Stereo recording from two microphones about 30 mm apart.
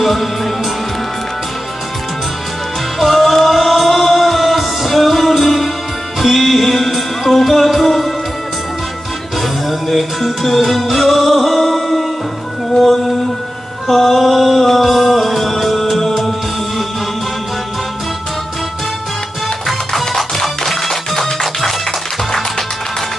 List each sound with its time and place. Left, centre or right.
0.0 s music: centre
3.0 s music: centre
9.4 s music: centre
12.7 s a sound: centre
13.8 s music: centre
19.6 s music: centre